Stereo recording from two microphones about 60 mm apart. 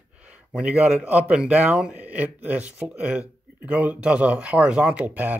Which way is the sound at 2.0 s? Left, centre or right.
Right.